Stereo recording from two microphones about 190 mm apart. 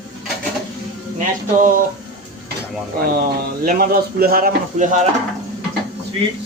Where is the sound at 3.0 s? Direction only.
50° right (ahead or behind).